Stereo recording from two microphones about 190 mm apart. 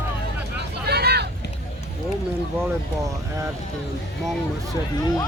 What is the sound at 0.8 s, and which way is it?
Vehicle, 60° right (ahead or behind).